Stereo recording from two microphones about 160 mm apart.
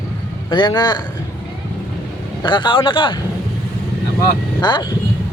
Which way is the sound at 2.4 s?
30° left (ahead or behind).